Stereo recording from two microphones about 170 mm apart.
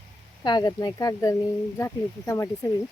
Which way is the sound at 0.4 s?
25° left (ahead or behind).